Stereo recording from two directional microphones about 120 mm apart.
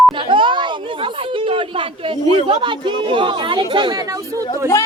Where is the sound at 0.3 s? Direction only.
45° right (ahead or behind).